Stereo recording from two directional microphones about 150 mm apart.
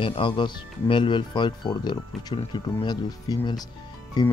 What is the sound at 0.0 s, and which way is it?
Speech, 35° left (ahead or behind).